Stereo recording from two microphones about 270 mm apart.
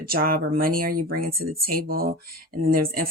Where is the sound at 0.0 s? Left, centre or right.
Right.